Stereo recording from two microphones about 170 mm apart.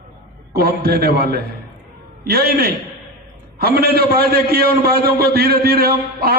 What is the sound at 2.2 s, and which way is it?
A man's voice, 65° right (ahead or behind).